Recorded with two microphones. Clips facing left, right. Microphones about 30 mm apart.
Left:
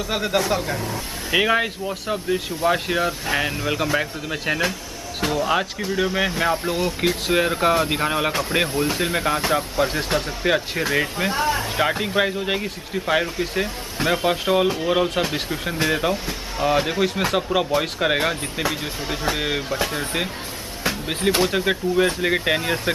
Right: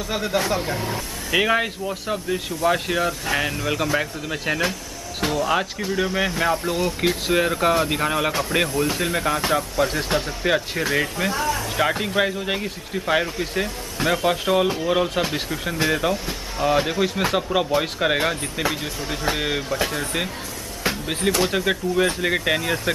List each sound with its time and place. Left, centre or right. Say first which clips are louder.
0.1 s speech: left 1 dB; centre
1.3 s speech: left 1 dB; centre
11.2 s speech: left 2 dB; left
11.7 s speech: even; centre
20.8 s music: even; centre
21.4 s speech: left 1 dB; centre